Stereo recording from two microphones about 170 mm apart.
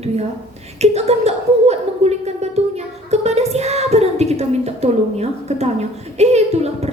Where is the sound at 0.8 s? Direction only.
40° right (ahead or behind).